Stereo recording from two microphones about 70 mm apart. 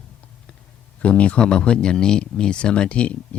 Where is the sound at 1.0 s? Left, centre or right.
Centre.